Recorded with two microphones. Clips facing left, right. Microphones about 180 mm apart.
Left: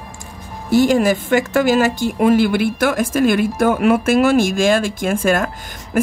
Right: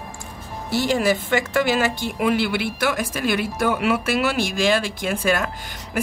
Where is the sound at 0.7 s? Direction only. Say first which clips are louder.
Left 7 dB; 45° left (ahead or behind).